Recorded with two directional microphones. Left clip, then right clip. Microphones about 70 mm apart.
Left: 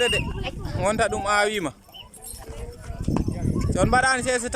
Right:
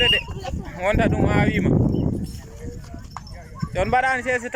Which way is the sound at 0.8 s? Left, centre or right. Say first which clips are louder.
Right 2 dB; left.